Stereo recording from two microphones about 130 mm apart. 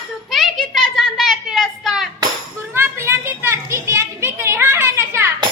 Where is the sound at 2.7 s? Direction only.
20° right (ahead or behind).